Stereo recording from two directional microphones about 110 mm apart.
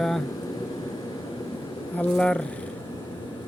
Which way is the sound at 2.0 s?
10° left (ahead or behind).